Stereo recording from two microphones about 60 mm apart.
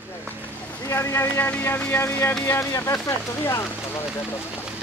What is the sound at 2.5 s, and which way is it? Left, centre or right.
Speech, left.